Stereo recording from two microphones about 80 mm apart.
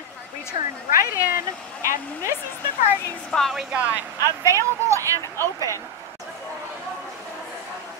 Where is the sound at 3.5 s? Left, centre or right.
Centre.